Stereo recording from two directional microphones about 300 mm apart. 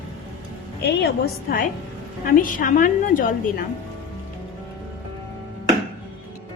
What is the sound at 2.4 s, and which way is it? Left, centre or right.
Speech, left.